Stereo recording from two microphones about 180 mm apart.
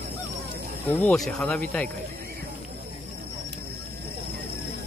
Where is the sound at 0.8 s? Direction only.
10° left (ahead or behind).